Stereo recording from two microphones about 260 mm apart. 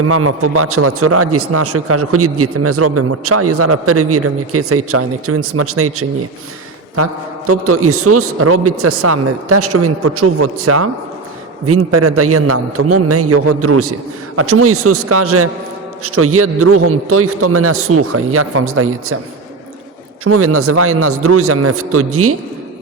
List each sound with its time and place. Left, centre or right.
0.0 s a man's voice: right
20.2 s a man's voice: right